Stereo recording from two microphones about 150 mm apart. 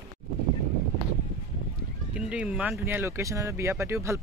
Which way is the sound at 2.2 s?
10° right (ahead or behind).